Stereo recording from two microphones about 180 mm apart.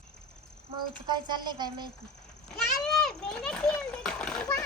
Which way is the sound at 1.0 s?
25° right (ahead or behind).